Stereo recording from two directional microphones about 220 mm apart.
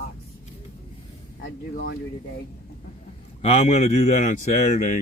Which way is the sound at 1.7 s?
40° left (ahead or behind).